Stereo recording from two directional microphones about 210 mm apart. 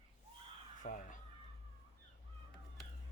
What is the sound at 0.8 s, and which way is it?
Caw, 40° left (ahead or behind).